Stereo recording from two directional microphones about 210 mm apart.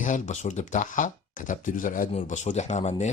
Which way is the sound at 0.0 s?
35° left (ahead or behind).